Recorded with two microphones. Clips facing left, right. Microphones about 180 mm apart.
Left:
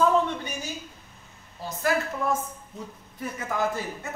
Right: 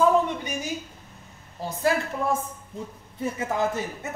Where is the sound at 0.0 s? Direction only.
10° right (ahead or behind).